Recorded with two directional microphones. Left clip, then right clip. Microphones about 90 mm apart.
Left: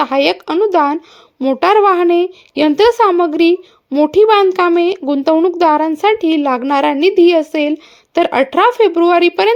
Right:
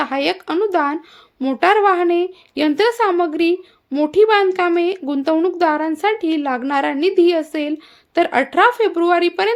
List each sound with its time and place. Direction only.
0.0 s speech: 60° left (ahead or behind)
1.5 s a woman's voice: 65° left (ahead or behind); by 9.6 s 80° left